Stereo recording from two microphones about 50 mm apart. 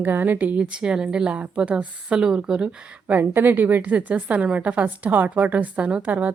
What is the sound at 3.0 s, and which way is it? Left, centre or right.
A woman's voice, right.